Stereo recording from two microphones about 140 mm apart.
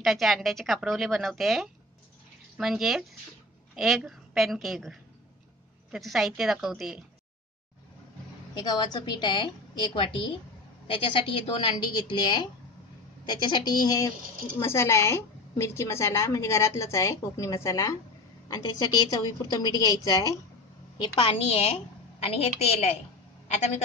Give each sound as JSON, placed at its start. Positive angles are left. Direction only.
{"t": 0.0, "sound": "a woman's voice", "side_deg": 0}
{"t": 8.5, "sound": "a woman's voice", "side_deg": 30}
{"t": 21.0, "sound": "a woman's voice", "side_deg": 40}